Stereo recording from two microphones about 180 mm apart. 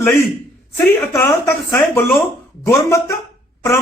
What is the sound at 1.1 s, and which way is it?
A man's voice, 15° left (ahead or behind).